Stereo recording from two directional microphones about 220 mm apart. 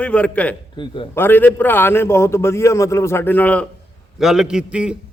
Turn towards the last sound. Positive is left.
turn(degrees=-5)  # may be behind; listen again after turning